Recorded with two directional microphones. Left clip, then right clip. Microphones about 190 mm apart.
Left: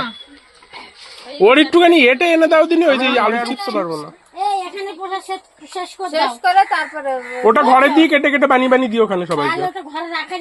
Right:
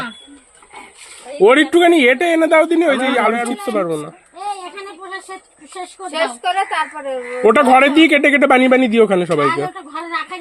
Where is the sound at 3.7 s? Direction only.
35° right (ahead or behind).